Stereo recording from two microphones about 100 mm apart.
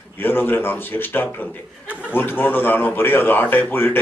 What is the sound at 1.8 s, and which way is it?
Speech, 15° right (ahead or behind).